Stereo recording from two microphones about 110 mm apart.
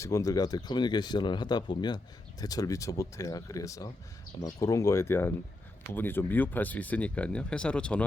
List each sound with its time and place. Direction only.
0.0 s speech: 30° left (ahead or behind); by 8.0 s 10° left (ahead or behind)